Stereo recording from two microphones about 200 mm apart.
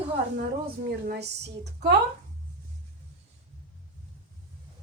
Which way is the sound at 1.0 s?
55° right (ahead or behind).